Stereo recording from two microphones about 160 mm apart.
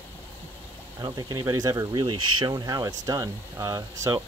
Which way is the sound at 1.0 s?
25° right (ahead or behind).